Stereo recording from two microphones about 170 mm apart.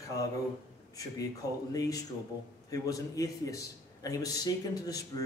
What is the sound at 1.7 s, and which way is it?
A man's voice, 20° left (ahead or behind).